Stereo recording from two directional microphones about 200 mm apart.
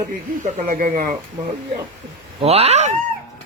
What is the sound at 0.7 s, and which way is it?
Speech, 40° right (ahead or behind).